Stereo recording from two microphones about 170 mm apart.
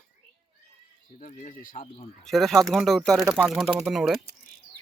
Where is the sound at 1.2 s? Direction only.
50° left (ahead or behind).